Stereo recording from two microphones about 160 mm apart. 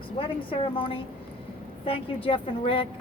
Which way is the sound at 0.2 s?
35° left (ahead or behind).